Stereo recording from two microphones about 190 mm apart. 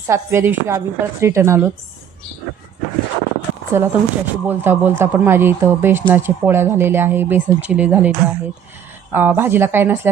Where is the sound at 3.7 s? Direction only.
10° right (ahead or behind).